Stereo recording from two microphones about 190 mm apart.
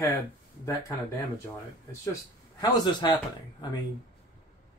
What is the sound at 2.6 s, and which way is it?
Speech, 20° left (ahead or behind).